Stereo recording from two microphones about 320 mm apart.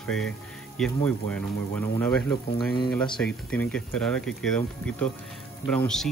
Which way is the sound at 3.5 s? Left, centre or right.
Centre.